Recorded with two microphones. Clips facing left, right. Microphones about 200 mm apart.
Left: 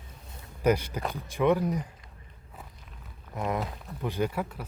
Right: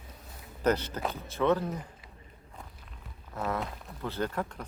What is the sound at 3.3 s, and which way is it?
Speech, 15° left (ahead or behind).